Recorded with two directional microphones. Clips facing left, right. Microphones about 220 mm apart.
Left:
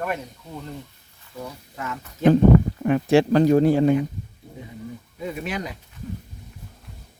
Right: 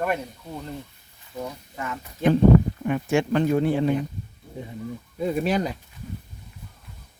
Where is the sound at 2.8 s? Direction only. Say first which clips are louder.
Left 5 dB; 35° left (ahead or behind).